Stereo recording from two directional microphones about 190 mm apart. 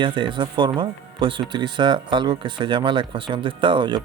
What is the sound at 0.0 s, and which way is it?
Speech, 25° right (ahead or behind).